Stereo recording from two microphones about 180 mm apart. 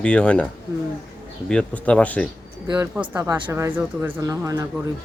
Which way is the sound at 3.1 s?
15° right (ahead or behind).